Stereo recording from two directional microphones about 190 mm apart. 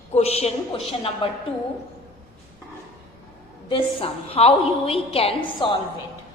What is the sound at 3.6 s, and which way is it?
A woman's voice, 25° left (ahead or behind).